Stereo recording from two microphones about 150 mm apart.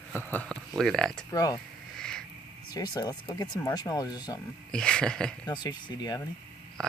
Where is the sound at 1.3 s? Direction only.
25° left (ahead or behind).